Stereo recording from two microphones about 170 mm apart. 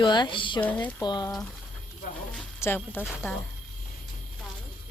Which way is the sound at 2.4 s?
10° left (ahead or behind).